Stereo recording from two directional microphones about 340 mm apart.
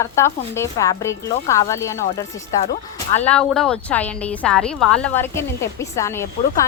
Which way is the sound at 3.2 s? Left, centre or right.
Centre.